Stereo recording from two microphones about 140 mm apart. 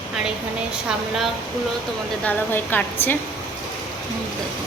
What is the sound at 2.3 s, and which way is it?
Speech, 15° left (ahead or behind).